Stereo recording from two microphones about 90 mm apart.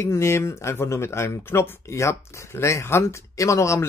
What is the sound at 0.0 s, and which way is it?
Speech, 30° left (ahead or behind).